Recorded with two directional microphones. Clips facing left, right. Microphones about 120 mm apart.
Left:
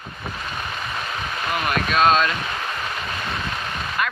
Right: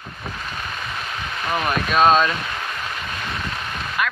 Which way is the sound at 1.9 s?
10° right (ahead or behind).